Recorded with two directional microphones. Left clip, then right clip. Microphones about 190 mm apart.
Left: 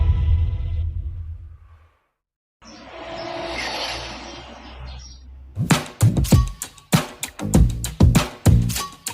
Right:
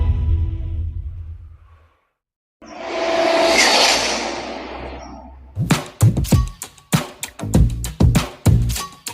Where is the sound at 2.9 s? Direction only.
55° right (ahead or behind).